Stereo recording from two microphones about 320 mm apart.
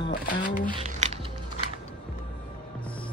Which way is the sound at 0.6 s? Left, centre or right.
Centre.